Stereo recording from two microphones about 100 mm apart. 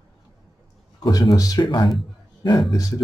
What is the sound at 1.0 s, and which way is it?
Speech, 45° left (ahead or behind).